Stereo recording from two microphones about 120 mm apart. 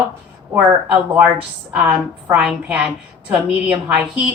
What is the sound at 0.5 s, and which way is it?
A woman's voice, 15° right (ahead or behind).